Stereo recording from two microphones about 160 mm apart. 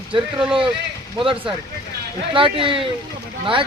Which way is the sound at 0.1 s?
30° right (ahead or behind).